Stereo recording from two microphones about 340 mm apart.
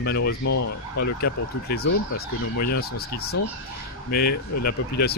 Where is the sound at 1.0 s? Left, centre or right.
Left.